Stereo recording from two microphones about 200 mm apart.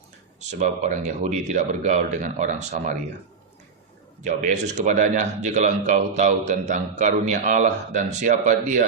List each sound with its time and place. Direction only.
0.3 s a man's voice: 40° right (ahead or behind)
4.2 s a man's voice: 35° right (ahead or behind)